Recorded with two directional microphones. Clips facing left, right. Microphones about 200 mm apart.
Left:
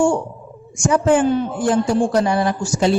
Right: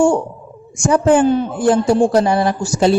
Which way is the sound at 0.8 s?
35° right (ahead or behind).